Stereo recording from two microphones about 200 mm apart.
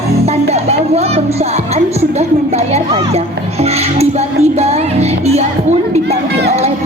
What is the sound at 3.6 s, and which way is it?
Music, 30° right (ahead or behind).